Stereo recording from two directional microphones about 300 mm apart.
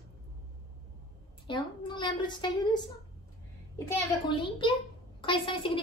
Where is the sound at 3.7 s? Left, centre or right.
Centre.